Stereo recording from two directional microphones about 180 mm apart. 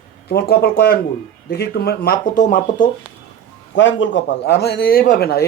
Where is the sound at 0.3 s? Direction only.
60° left (ahead or behind).